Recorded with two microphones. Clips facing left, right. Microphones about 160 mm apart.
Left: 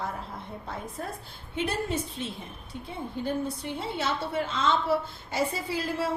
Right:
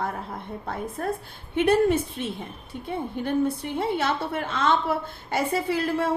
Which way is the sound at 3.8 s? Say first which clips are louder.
Right 5 dB; 60° right (ahead or behind).